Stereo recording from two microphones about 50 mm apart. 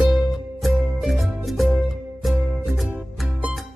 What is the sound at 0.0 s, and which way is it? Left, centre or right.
Music, centre.